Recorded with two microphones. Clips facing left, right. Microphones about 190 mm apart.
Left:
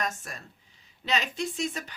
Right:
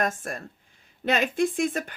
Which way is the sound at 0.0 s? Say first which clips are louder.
Right 6 dB; 50° right (ahead or behind).